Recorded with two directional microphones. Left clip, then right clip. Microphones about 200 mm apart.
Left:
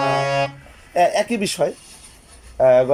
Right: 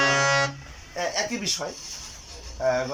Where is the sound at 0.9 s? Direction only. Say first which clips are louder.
Left 11 dB; 50° left (ahead or behind).